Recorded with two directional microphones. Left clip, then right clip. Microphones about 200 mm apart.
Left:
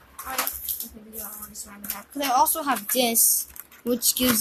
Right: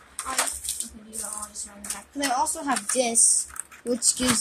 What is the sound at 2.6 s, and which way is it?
Speech, 45° left (ahead or behind).